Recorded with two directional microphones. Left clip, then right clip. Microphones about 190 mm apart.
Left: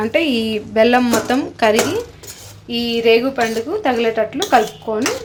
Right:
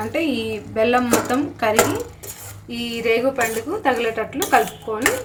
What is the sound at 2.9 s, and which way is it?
Speech, 50° left (ahead or behind).